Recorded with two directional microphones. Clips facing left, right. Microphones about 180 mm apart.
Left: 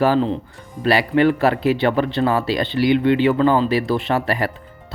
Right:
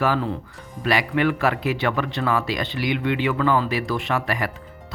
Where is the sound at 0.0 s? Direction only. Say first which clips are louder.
Left 6 dB; 30° left (ahead or behind).